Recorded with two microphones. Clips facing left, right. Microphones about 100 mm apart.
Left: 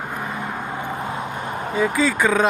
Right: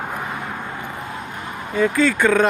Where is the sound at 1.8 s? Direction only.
5° left (ahead or behind).